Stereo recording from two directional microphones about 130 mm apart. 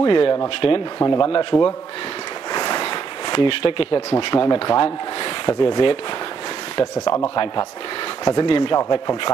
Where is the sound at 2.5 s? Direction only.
35° left (ahead or behind).